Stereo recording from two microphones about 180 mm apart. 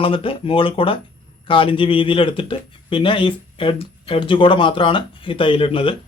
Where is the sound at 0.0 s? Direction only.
30° left (ahead or behind).